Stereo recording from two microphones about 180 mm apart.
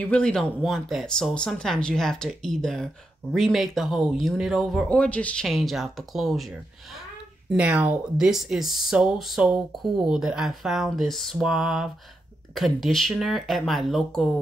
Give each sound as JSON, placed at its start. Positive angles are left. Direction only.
{"t": 0.0, "sound": "speech", "side_deg": 5}